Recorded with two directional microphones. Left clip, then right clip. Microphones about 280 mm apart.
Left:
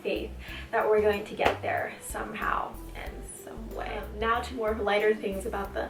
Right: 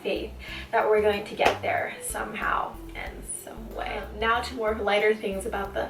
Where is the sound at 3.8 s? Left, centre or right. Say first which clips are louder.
Right 3 dB; centre.